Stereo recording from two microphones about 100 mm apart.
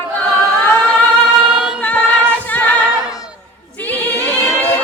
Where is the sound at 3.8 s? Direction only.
15° left (ahead or behind).